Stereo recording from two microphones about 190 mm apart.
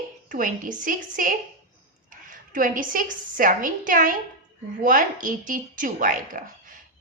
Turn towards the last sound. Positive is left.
turn(degrees=-45)  # may be behind; listen again after turning